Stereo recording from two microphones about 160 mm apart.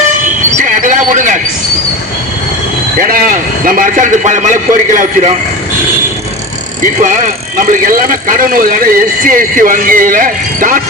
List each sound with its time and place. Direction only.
0.7 s bird: 55° right (ahead or behind)
3.0 s speech: 60° right (ahead or behind)
7.6 s speech: 60° right (ahead or behind)